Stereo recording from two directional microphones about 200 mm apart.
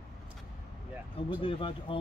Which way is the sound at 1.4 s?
25° left (ahead or behind).